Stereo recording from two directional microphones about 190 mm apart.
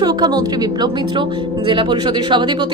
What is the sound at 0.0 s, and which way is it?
A woman's voice, 20° right (ahead or behind).